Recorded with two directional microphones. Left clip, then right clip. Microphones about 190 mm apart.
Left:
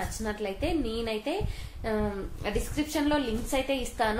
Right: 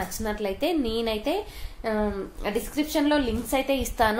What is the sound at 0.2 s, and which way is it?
A woman's voice, 40° right (ahead or behind).